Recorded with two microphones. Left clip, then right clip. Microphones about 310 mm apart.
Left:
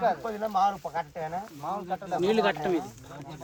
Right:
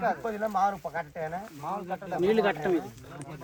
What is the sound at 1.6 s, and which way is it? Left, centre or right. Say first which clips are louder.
Speech: left 1 dB; left.